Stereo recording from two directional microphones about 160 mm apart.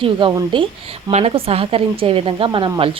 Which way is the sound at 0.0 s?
30° right (ahead or behind).